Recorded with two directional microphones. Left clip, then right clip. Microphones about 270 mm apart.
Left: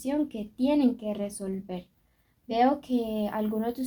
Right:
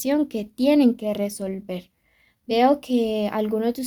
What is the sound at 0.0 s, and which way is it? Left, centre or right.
A woman's voice, right.